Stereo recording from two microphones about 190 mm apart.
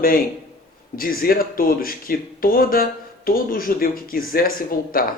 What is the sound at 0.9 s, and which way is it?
Speech, 50° left (ahead or behind).